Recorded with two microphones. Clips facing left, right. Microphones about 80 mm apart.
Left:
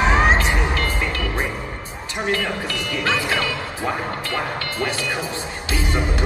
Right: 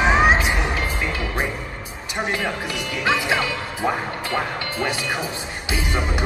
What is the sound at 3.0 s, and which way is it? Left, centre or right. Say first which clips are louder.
Music: right 2 dB; centre.